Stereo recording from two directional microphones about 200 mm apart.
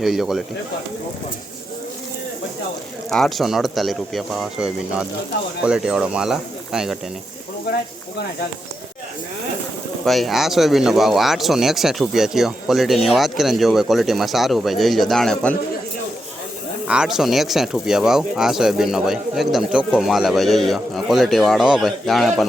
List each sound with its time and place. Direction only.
0.0 s speech: centre (ahead or behind)
3.1 s speech: centre (ahead or behind)
10.1 s speech: centre (ahead or behind)
16.8 s speech: 5° right (ahead or behind)